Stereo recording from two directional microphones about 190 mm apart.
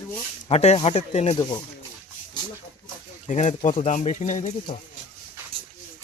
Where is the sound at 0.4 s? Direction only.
35° left (ahead or behind).